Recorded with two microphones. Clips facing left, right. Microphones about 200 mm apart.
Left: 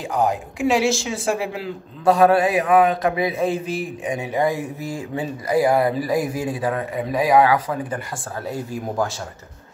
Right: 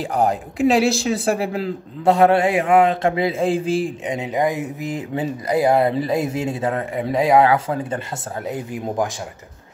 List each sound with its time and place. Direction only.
0.0 s speech: 35° right (ahead or behind); by 9.1 s 20° right (ahead or behind)